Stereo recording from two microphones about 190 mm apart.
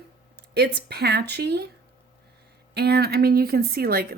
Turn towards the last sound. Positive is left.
turn(degrees=-50)  # may be behind; listen again after turning